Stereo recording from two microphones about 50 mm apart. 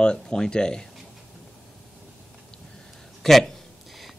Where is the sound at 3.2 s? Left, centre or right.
Centre.